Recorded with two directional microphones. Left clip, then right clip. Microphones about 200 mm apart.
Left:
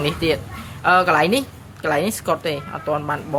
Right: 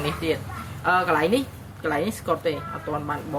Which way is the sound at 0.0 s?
65° left (ahead or behind).